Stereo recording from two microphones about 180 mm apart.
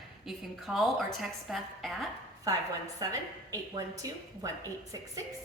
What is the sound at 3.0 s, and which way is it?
A woman's voice, 20° right (ahead or behind).